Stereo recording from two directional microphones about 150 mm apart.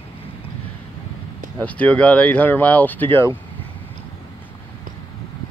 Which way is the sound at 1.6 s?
10° left (ahead or behind).